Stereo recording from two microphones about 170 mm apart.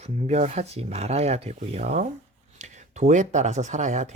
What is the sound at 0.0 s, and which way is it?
Speech, 40° right (ahead or behind).